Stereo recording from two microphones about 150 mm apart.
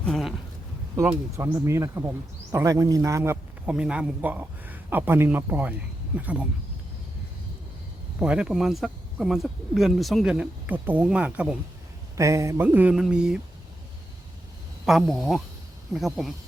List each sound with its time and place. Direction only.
0.0 s a sound: centre (ahead or behind)
0.9 s speech: 20° right (ahead or behind)
3.7 s speech: 5° right (ahead or behind)
8.2 s speech: 5° right (ahead or behind)
12.1 s speech: 20° right (ahead or behind)
14.8 s speech: centre (ahead or behind)